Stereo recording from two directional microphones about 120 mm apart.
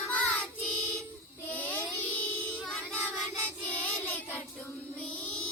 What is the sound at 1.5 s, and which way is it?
Child singing, 15° left (ahead or behind).